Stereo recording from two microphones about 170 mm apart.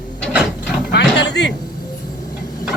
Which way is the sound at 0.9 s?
85° left.